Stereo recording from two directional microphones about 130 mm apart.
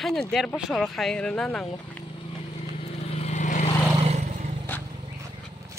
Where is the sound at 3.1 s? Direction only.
60° left (ahead or behind).